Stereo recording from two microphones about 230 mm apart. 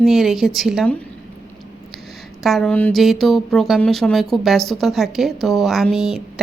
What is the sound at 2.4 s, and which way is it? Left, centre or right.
Speech, centre.